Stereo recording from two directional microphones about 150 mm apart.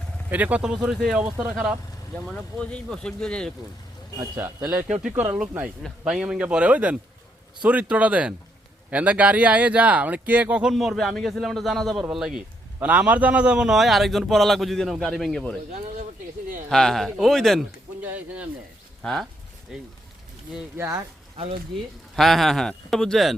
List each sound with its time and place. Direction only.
0.3 s a man's voice: 10° right (ahead or behind)
2.1 s a man's voice: 5° left (ahead or behind)
4.2 s a man's voice: 15° right (ahead or behind); by 15.5 s 5° left (ahead or behind)
16.6 s a man's voice: 5° left (ahead or behind)
18.0 s speech: 10° right (ahead or behind)
19.0 s a man's voice: centre (ahead or behind)
21.3 s speech: 40° right (ahead or behind)
22.1 s a man's voice: centre (ahead or behind)